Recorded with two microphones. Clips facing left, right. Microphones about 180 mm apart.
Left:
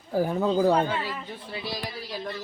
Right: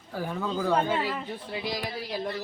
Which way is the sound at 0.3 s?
35° left (ahead or behind).